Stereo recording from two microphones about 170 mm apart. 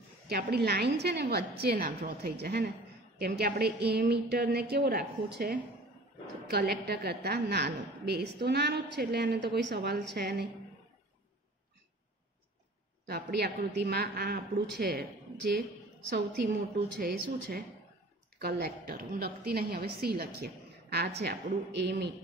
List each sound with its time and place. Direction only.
0.3 s a woman's voice: 65° right (ahead or behind)
13.0 s a woman's voice: 75° right (ahead or behind)
17.0 s a woman's voice: 65° right (ahead or behind)